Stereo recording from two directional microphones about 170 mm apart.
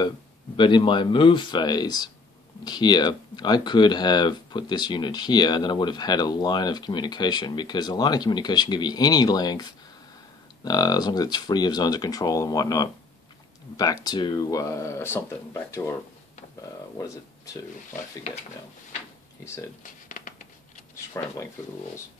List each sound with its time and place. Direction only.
0.6 s speech: 30° left (ahead or behind)
14.0 s speech: 25° left (ahead or behind)
17.0 s speech: 20° left (ahead or behind)
18.3 s speech: 35° left (ahead or behind)
19.8 s a sound: 50° left (ahead or behind)
21.2 s speech: 15° left (ahead or behind)